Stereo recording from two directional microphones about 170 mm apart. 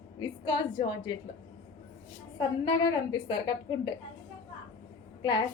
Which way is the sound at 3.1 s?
25° left (ahead or behind).